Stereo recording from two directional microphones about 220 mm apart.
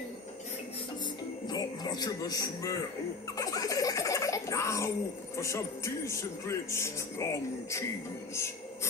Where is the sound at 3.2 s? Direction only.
15° left (ahead or behind).